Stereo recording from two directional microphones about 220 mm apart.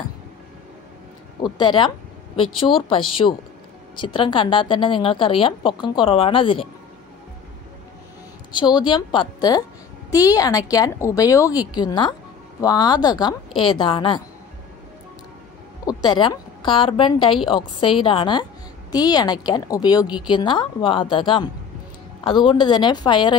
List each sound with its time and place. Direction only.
1.4 s a woman's voice: 20° left (ahead or behind)
8.5 s a woman's voice: 20° left (ahead or behind)
15.8 s a woman's voice: 20° left (ahead or behind)